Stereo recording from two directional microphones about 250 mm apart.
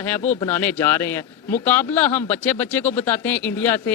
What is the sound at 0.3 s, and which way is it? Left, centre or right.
Speech, centre.